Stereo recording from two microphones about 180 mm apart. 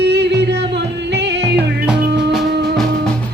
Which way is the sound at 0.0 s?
70° right (ahead or behind).